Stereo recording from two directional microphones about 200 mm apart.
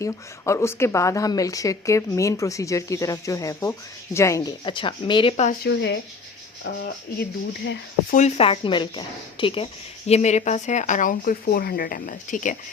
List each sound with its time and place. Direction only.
0.0 s speech: 15° left (ahead or behind)
5.6 s speech: 60° left (ahead or behind)
8.1 s speech: 35° left (ahead or behind)